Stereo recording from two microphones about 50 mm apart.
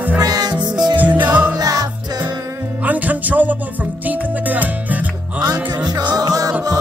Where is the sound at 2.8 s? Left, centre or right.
Right.